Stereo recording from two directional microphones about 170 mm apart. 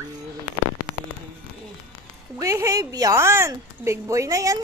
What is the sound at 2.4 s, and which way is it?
A woman's voice, 20° right (ahead or behind).